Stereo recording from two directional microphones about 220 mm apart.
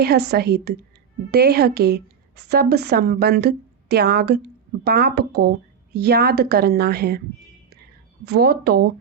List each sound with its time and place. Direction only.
0.3 s a woman's voice: 45° right (ahead or behind)
8.2 s a woman's voice: 45° right (ahead or behind)